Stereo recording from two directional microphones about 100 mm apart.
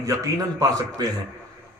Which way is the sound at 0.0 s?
30° right (ahead or behind).